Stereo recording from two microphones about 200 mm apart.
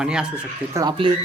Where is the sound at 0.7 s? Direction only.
20° right (ahead or behind).